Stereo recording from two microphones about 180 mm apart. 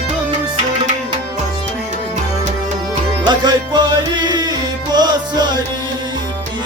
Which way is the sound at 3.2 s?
25° right (ahead or behind).